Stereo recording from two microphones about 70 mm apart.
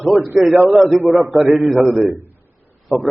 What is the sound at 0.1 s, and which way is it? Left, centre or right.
A man's voice, centre.